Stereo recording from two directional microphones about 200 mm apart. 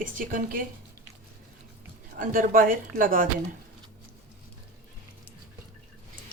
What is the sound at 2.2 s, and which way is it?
Speech, 45° right (ahead or behind).